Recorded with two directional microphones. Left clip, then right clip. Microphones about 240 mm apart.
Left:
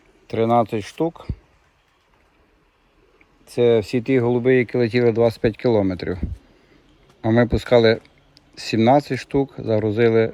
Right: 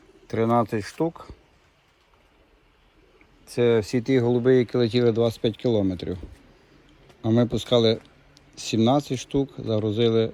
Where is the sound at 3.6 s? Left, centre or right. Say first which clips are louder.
Left 4 dB; centre.